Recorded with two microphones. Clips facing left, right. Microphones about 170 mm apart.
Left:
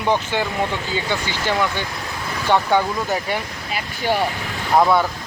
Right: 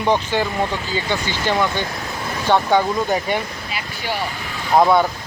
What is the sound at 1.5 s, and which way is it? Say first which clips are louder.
Speech: right 2 dB; 15° right (ahead or behind).